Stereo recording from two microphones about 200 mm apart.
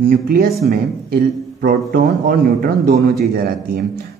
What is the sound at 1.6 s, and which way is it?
A man's voice, 45° right (ahead or behind).